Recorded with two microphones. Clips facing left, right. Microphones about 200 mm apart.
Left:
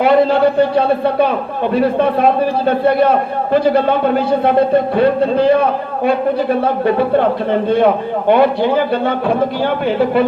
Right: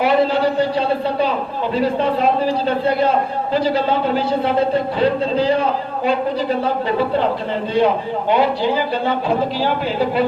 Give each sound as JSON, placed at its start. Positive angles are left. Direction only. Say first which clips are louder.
{"t": 0.0, "sound": "a man's voice", "louder": "left 5 dB", "side_deg": 55}